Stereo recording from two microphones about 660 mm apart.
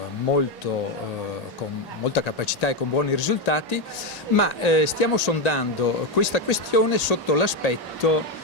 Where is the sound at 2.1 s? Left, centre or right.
Left.